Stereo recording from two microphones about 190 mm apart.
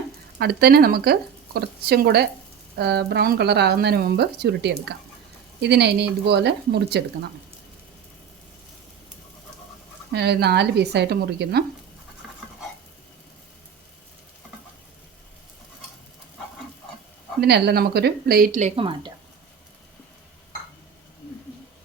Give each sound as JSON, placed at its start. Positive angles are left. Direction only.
{"t": 0.3, "sound": "speech", "side_deg": -55}
{"t": 10.1, "sound": "speech", "side_deg": -60}
{"t": 17.4, "sound": "speech", "side_deg": -60}
{"t": 18.8, "sound": "speech", "side_deg": -25}